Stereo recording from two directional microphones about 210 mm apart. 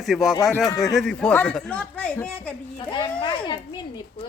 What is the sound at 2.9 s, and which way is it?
Speech, 20° left (ahead or behind).